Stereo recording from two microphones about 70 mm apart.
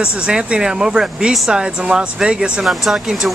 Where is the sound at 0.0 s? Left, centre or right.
Centre.